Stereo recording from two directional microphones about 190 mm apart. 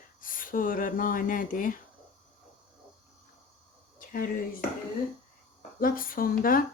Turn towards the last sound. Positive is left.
turn(degrees=50)  # may be behind; listen again after turning